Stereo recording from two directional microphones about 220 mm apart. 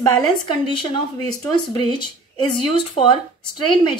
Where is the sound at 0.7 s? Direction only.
20° left (ahead or behind).